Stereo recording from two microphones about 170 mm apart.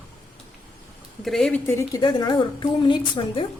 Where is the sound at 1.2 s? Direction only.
Centre (ahead or behind); by 3.4 s 30° left (ahead or behind).